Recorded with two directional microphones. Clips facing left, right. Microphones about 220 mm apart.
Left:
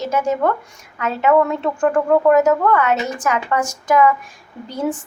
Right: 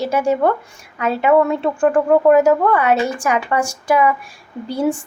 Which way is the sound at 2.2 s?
30° right (ahead or behind).